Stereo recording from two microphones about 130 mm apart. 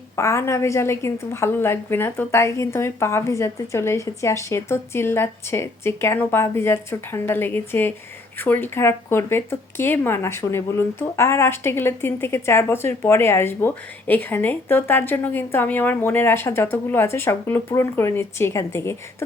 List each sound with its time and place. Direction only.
0.2 s a woman's voice: 20° left (ahead or behind)